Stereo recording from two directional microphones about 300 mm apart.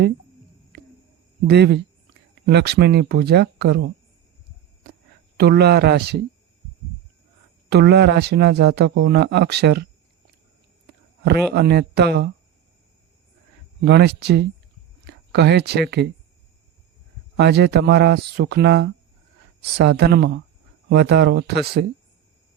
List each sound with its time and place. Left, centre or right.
1.5 s speech: right
5.4 s speech: right
7.7 s speech: right
11.2 s speech: right
13.8 s speech: right
17.3 s speech: right